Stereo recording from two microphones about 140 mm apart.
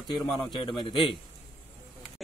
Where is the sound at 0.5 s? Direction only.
35° left (ahead or behind).